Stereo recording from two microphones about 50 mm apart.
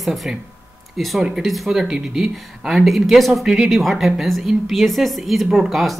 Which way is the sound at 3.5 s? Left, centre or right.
Centre.